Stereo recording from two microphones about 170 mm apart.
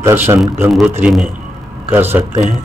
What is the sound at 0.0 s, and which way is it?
Speech, 15° right (ahead or behind).